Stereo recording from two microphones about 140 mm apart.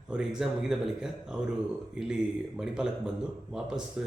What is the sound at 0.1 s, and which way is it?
A man's voice, 5° right (ahead or behind).